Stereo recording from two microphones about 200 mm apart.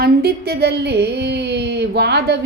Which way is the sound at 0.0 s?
50° right (ahead or behind).